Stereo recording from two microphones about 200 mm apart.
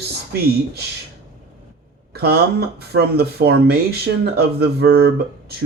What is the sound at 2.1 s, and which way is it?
Speech, 50° right (ahead or behind).